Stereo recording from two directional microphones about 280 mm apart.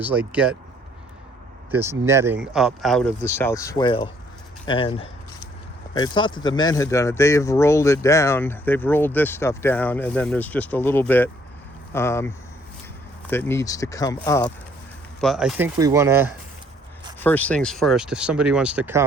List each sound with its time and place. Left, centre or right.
0.0 s speech: centre
1.7 s speech: centre
13.3 s speech: centre
15.2 s speech: centre
17.2 s speech: centre